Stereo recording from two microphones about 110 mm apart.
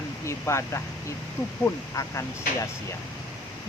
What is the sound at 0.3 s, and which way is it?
Speech, 25° left (ahead or behind).